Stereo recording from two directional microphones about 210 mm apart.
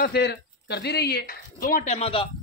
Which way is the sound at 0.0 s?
50° left (ahead or behind).